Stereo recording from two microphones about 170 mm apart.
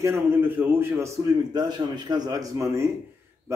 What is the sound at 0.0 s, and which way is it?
A man's voice, 15° right (ahead or behind).